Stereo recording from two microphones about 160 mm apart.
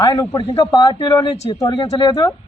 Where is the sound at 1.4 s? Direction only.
40° left (ahead or behind).